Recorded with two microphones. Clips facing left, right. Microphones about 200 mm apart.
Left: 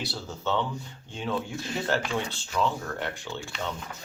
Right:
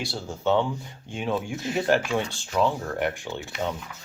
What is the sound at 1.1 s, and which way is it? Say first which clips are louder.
Speech: right 3 dB; 20° right (ahead or behind).